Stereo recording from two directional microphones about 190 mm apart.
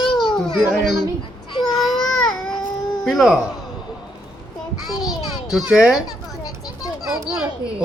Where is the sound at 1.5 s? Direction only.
25° left (ahead or behind).